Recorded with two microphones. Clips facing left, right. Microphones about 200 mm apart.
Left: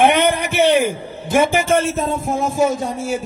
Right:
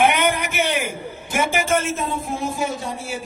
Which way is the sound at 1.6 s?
35° left (ahead or behind).